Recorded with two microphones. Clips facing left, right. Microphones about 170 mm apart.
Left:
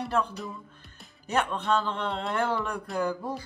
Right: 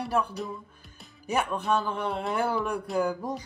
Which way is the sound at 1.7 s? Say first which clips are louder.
Right 1 dB; 10° right (ahead or behind).